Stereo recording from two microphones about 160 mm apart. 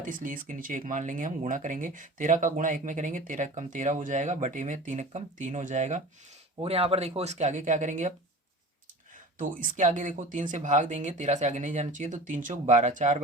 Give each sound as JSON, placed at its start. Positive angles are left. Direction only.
{"t": 0.0, "sound": "speech", "side_deg": -55}
{"t": 6.6, "sound": "speech", "side_deg": -40}
{"t": 9.4, "sound": "speech", "side_deg": -55}